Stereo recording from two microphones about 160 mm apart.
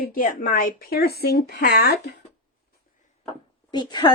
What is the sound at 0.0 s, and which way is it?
Speech, 60° left (ahead or behind).